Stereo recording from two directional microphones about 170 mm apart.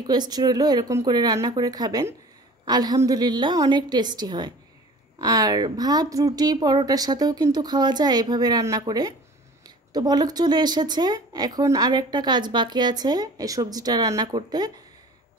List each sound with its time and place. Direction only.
0.0 s a woman's voice: 25° right (ahead or behind)